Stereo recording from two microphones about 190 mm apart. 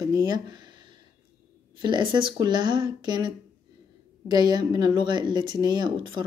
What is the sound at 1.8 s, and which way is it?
Speech, 25° right (ahead or behind).